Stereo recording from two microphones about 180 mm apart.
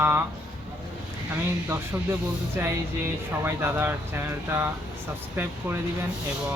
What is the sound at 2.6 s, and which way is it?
Speech, 15° right (ahead or behind).